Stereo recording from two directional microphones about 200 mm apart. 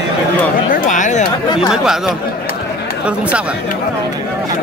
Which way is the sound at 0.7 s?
40° left (ahead or behind).